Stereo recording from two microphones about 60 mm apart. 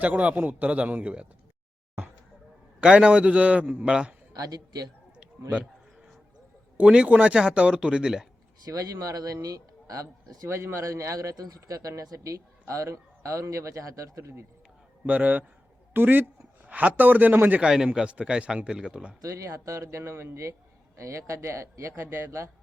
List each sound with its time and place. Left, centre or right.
0.0 s speech: right
2.8 s speech: centre
4.4 s a man's voice: right
6.7 s speech: centre
8.6 s a man's voice: right
10.5 s a man's voice: right
10.8 s speech: right
15.0 s speech: right
17.6 s a man's voice: centre
19.2 s a man's voice: right
21.9 s a man's voice: right